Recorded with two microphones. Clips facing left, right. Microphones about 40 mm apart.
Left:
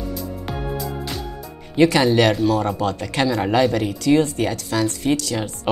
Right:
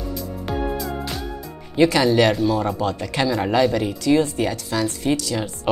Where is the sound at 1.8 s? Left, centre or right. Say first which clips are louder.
Left 1 dB; left.